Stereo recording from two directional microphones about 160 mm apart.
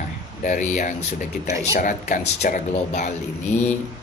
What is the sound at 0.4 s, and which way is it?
Speech, 50° left (ahead or behind).